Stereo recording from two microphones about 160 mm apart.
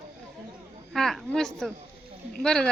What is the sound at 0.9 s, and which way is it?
A woman's voice, centre (ahead or behind).